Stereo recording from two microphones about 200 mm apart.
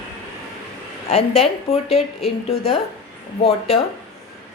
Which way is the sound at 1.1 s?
30° left (ahead or behind).